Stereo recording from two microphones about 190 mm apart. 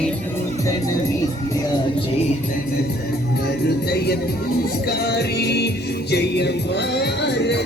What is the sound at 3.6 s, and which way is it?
Music, 60° left (ahead or behind).